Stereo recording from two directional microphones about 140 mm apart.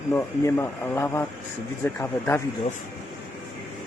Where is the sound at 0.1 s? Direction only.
15° left (ahead or behind).